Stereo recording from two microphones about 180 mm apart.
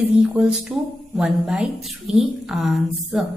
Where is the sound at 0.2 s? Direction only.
Centre (ahead or behind).